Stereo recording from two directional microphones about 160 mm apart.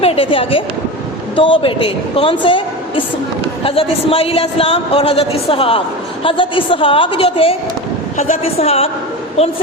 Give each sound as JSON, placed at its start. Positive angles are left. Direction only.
{"t": 0.0, "sound": "a woman's voice", "side_deg": 35}